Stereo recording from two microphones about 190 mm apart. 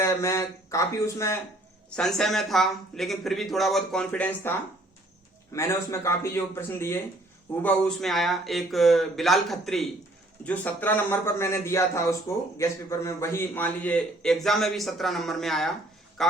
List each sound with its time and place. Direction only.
0.0 s a man's voice: 15° left (ahead or behind)
2.0 s a man's voice: 5° left (ahead or behind)
5.5 s a man's voice: 15° left (ahead or behind)
7.6 s a man's voice: centre (ahead or behind)